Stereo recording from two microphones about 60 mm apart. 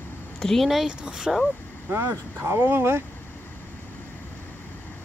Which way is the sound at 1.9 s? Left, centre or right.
Right.